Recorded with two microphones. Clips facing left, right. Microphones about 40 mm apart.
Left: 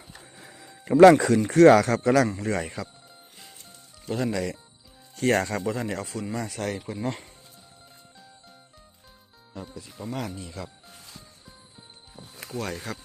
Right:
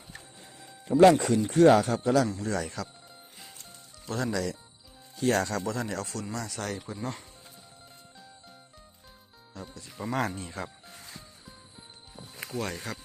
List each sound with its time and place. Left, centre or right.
1.1 s speech: left
2.5 s speech: left
3.6 s music: centre
5.3 s speech: left
5.5 s speech: centre
6.3 s speech: centre
6.9 s speech: left
9.6 s music: centre
10.1 s speech: right
12.5 s speech: centre